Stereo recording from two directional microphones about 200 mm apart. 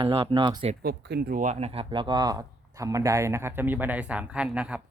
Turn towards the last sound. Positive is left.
turn(degrees=-5)  # may be behind; listen again after turning